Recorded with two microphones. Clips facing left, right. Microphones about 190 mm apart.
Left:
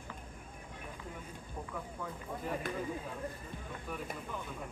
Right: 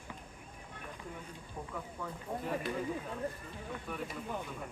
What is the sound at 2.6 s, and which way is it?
Speech, 50° left (ahead or behind).